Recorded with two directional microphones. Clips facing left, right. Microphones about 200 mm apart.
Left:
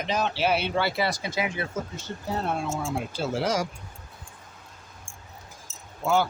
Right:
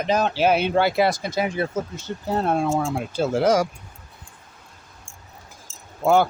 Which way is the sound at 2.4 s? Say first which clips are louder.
Right 9 dB; 60° right (ahead or behind).